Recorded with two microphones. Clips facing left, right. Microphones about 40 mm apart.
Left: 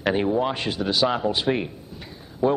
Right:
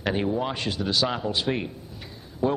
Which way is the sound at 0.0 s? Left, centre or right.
Centre.